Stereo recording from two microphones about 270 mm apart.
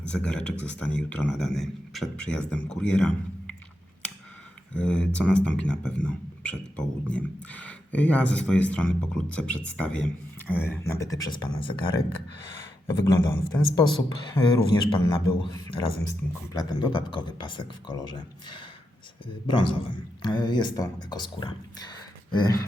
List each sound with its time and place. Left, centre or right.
0.3 s speech: centre
4.7 s speech: centre
12.9 s speech: centre